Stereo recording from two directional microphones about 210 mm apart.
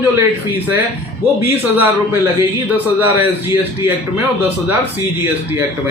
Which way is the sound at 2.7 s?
10° right (ahead or behind).